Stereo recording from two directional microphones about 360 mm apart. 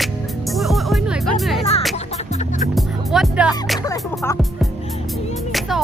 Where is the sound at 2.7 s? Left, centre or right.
Centre.